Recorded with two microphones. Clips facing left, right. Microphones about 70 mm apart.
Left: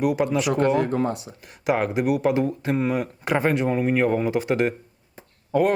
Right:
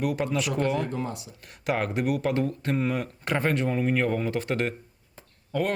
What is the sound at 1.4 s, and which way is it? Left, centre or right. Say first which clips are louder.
Speech: left 4 dB; centre.